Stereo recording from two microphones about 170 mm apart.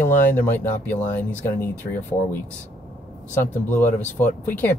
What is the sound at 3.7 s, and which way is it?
Speech, 10° left (ahead or behind).